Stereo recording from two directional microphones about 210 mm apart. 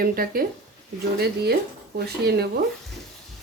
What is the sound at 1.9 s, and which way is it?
Speech, 50° right (ahead or behind).